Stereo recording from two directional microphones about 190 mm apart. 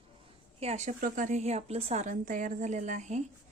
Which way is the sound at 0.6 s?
35° right (ahead or behind).